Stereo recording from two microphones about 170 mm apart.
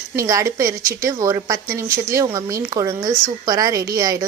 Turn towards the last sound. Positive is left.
turn(degrees=-20)  # may be behind; listen again after turning